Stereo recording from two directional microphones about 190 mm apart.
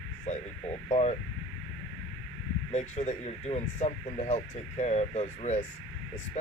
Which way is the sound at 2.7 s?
35° left (ahead or behind).